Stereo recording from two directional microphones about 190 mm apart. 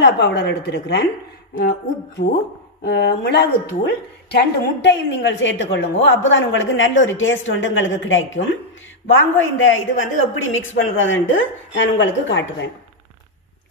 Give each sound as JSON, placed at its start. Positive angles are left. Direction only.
{"t": 0.0, "sound": "a woman's voice", "side_deg": 65}
{"t": 2.8, "sound": "a woman's voice", "side_deg": 60}